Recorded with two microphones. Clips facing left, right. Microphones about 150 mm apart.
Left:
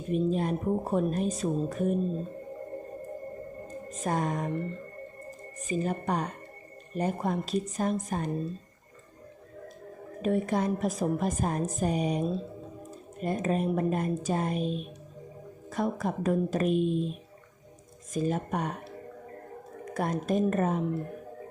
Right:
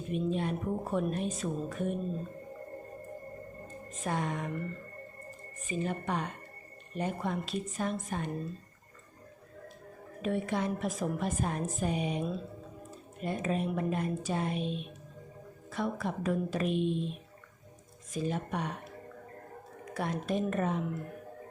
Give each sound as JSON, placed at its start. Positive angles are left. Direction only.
{"t": 0.1, "sound": "a woman's voice", "side_deg": 40}
{"t": 3.8, "sound": "a woman's voice", "side_deg": 40}
{"t": 5.5, "sound": "a woman's voice", "side_deg": 40}
{"t": 10.2, "sound": "a woman's voice", "side_deg": 40}
{"t": 19.9, "sound": "a woman's voice", "side_deg": 45}